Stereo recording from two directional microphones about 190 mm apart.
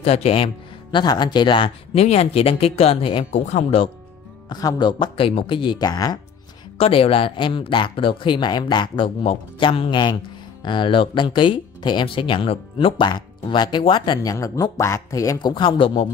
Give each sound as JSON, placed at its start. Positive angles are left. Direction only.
{"t": 0.0, "sound": "speech", "side_deg": 30}